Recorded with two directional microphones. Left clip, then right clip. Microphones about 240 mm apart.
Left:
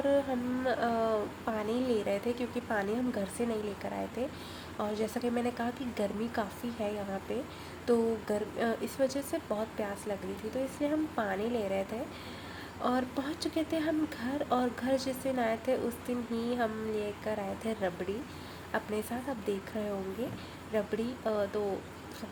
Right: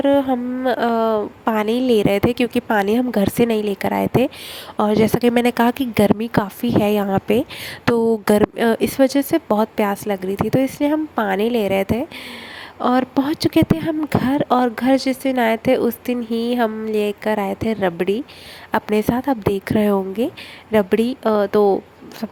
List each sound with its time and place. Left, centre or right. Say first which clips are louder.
0.0 s a woman's voice: right 13 dB; right